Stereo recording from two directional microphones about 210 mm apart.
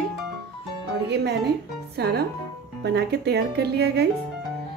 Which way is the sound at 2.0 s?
50° right (ahead or behind).